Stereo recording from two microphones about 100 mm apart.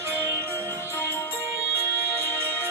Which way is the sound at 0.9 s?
25° left (ahead or behind).